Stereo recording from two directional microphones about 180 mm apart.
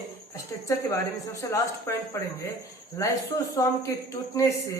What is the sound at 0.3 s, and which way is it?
A man's voice, 20° left (ahead or behind).